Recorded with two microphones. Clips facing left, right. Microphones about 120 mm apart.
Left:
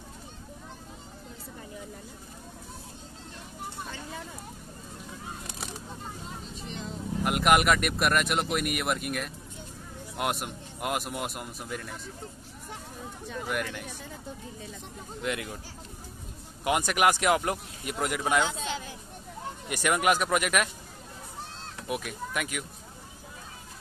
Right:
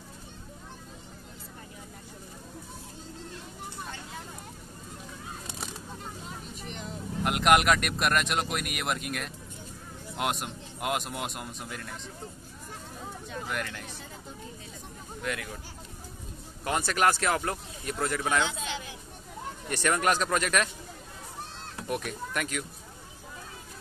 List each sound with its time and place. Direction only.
6.7 s speech: centre (ahead or behind)
13.5 s speech: 10° left (ahead or behind)
15.2 s speech: 20° left (ahead or behind)
16.6 s speech: 15° left (ahead or behind)
19.7 s speech: 10° left (ahead or behind)
21.8 s speech: 5° left (ahead or behind)